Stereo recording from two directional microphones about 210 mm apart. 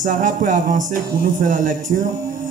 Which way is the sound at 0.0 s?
35° right (ahead or behind).